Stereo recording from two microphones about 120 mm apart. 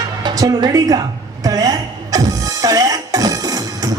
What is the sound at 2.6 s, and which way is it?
Music, 30° right (ahead or behind).